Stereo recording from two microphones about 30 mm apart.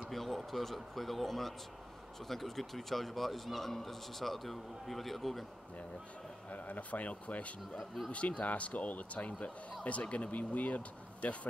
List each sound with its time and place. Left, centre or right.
0.1 s a man's voice: centre
6.5 s speech: left